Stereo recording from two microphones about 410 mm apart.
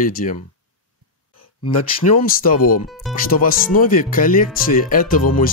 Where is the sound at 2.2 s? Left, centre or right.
Left.